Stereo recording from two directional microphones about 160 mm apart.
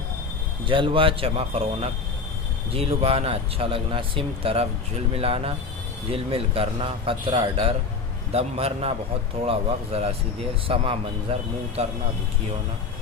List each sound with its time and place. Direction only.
0.7 s speech: 30° right (ahead or behind)